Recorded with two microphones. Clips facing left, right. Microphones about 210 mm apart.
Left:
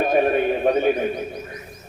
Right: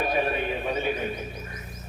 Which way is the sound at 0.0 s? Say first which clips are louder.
Left 8 dB; 50° left (ahead or behind).